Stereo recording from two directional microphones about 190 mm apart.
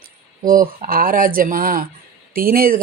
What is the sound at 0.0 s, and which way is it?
Speech, 45° right (ahead or behind).